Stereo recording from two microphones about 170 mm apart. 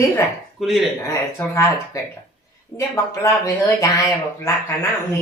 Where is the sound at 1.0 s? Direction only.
15° left (ahead or behind).